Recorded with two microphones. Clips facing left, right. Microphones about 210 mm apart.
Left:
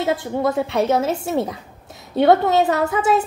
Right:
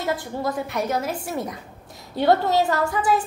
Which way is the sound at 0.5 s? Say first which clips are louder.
Left 6 dB; 25° left (ahead or behind).